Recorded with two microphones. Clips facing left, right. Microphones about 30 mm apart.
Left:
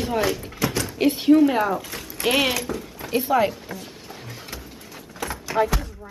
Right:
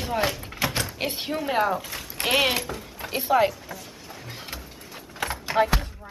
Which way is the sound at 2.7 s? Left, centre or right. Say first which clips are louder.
Left 6 dB; centre.